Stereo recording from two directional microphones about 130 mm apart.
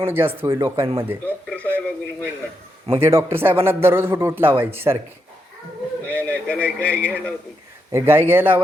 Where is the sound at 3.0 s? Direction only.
20° right (ahead or behind).